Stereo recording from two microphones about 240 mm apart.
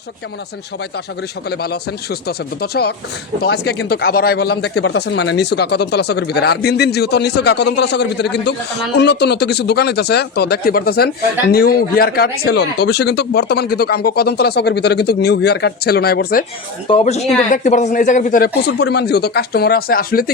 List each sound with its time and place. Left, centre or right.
1.5 s speech: left
16.9 s speech: left